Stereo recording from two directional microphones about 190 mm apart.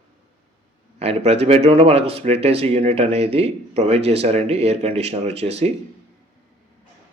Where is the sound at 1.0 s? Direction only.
35° right (ahead or behind).